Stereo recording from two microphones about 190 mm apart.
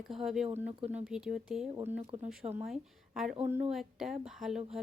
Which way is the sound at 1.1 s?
5° right (ahead or behind).